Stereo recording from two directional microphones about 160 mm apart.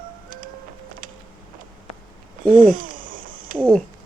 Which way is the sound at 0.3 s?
60° right (ahead or behind).